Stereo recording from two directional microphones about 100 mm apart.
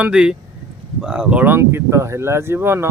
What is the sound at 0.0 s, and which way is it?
Speech, 10° right (ahead or behind).